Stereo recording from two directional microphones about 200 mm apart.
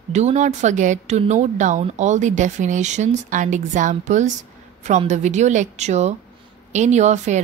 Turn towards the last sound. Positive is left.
turn(degrees=-35)  # may be behind; listen again after turning